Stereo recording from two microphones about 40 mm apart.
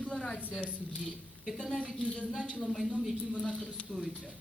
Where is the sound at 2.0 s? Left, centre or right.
Left.